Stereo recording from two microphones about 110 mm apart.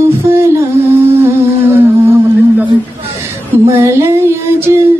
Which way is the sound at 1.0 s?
20° right (ahead or behind).